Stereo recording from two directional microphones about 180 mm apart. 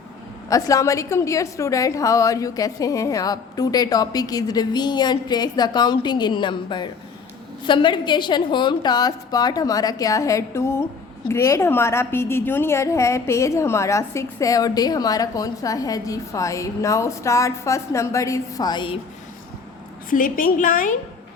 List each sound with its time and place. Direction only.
0.5 s a woman's voice: 20° left (ahead or behind)
20.1 s a woman's voice: 50° left (ahead or behind)